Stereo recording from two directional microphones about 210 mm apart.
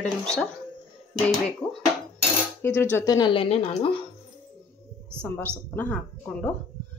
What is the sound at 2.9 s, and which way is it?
Speech, 15° left (ahead or behind).